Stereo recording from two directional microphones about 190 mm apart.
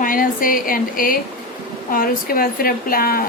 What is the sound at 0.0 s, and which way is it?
A woman's voice, 45° left (ahead or behind).